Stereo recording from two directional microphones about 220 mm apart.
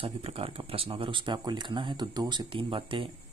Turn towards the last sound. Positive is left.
turn(degrees=-25)  # may be behind; listen again after turning